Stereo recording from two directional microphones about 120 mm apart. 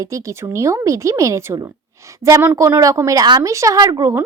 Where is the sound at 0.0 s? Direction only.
25° right (ahead or behind).